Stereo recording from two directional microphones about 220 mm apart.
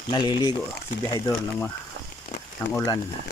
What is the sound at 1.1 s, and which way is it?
Speech, 10° left (ahead or behind).